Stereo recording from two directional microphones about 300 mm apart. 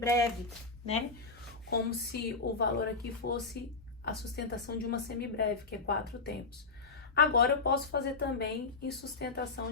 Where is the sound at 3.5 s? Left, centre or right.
Left.